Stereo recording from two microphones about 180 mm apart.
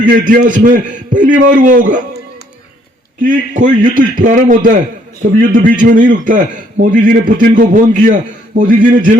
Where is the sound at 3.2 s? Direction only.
45° right (ahead or behind).